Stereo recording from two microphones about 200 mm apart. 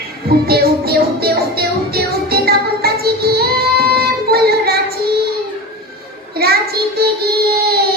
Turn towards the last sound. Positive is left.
turn(degrees=-50)  # may be behind; listen again after turning